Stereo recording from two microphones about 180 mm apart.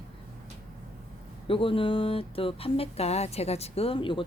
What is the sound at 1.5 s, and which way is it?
Speech, 30° left (ahead or behind).